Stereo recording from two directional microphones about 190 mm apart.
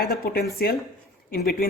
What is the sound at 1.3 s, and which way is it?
Speech, 50° left (ahead or behind).